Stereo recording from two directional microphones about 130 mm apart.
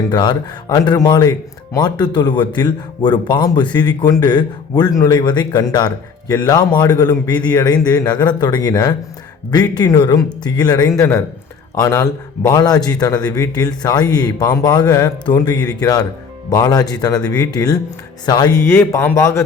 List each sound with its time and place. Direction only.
0.1 s a man's voice: 35° left (ahead or behind)
18.7 s a man's voice: 20° left (ahead or behind)